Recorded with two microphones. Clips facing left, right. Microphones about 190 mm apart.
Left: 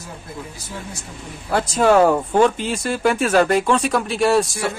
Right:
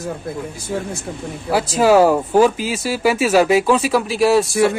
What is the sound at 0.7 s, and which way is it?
Speech, 60° right (ahead or behind).